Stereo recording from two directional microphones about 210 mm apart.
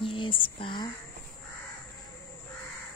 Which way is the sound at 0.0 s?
25° left (ahead or behind).